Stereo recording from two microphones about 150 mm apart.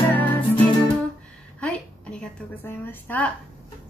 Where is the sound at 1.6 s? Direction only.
10° left (ahead or behind).